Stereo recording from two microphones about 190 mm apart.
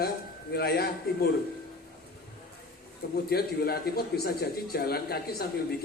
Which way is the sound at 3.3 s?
55° left (ahead or behind).